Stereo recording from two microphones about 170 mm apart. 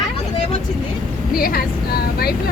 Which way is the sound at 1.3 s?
60° left (ahead or behind).